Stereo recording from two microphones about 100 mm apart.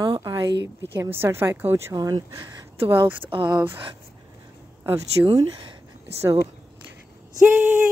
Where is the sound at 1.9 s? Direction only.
40° right (ahead or behind).